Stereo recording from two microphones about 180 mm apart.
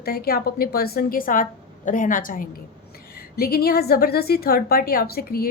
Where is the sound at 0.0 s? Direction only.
60° left (ahead or behind).